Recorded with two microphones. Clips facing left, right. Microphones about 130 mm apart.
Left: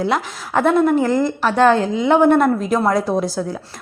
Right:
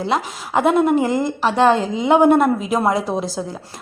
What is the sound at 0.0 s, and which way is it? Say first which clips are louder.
A woman's voice: left 1 dB; 5° right (ahead or behind).